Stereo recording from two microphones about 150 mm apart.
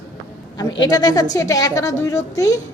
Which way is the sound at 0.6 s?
25° left (ahead or behind).